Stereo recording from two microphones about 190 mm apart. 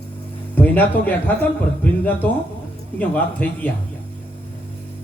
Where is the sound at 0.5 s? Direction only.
10° left (ahead or behind).